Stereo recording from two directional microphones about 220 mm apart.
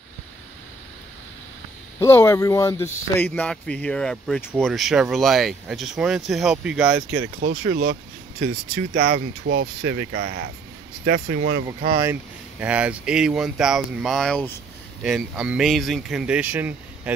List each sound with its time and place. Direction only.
2.0 s speech: 10° left (ahead or behind); by 7.1 s 5° right (ahead or behind)
7.4 s speech: 45° right (ahead or behind)
12.0 s speech: 10° right (ahead or behind)